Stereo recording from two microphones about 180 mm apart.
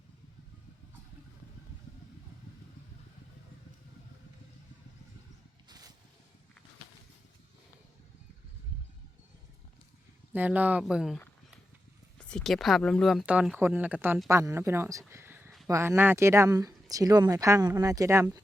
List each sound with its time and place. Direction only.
5.6 s a sound: 20° right (ahead or behind)
10.3 s speech: 10° right (ahead or behind)
12.3 s speech: centre (ahead or behind); by 18.3 s 15° right (ahead or behind)